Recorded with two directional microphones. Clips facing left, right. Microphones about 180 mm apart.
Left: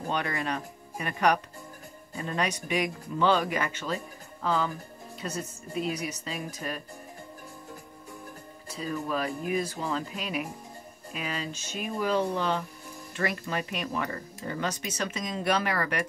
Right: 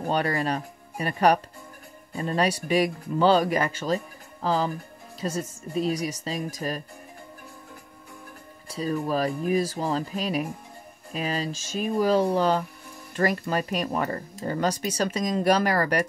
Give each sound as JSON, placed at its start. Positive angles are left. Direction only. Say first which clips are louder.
{"t": 0.0, "sound": "speech", "louder": "right 5 dB", "side_deg": -35}
{"t": 8.6, "sound": "music", "louder": "right 6 dB", "side_deg": -35}
{"t": 9.0, "sound": "speech", "louder": "right 4 dB", "side_deg": -35}